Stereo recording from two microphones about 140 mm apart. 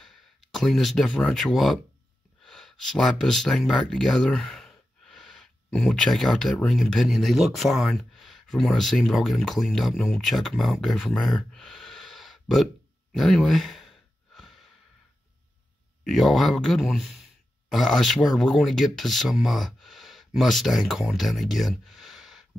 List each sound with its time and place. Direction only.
0.0 s speech: centre (ahead or behind)
13.1 s sigh: centre (ahead or behind)
16.1 s speech: centre (ahead or behind)